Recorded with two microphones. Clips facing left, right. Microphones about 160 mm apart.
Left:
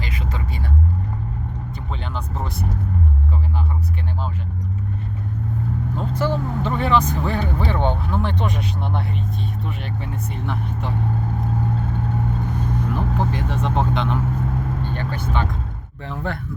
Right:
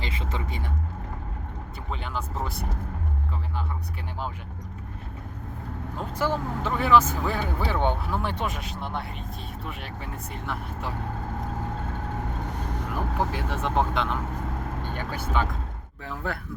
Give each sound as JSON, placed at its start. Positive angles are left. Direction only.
{"t": 0.0, "sound": "speech", "side_deg": -25}
{"t": 1.9, "sound": "speech", "side_deg": -5}
{"t": 6.0, "sound": "speech", "side_deg": -10}
{"t": 10.4, "sound": "speech", "side_deg": 0}
{"t": 12.9, "sound": "speech", "side_deg": -5}